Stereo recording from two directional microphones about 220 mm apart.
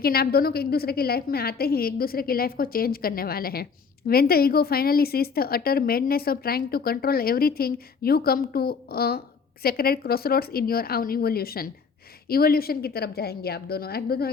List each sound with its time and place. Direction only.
0.0 s a woman's voice: 45° left (ahead or behind)